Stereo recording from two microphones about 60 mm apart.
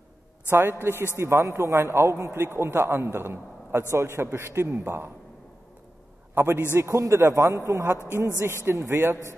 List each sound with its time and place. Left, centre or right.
0.5 s a man's voice: right
1.1 s a man's voice: right
6.3 s a man's voice: right
6.7 s speech: right
8.4 s a man's voice: right